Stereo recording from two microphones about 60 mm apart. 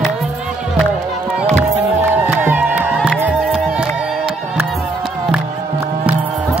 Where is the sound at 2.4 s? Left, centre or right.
Right.